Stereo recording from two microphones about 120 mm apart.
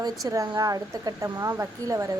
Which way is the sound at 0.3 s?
35° right (ahead or behind).